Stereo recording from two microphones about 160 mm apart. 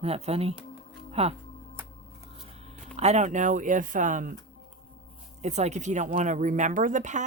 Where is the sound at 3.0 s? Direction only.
45° right (ahead or behind).